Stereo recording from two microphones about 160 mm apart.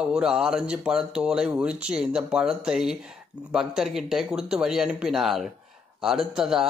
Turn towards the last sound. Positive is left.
turn(degrees=-5)  # may be behind; listen again after turning